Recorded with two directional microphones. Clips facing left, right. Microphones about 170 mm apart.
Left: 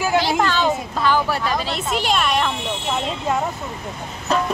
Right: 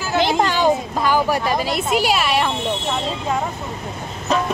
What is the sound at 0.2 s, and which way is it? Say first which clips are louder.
Speech: right 2 dB; 20° right (ahead or behind).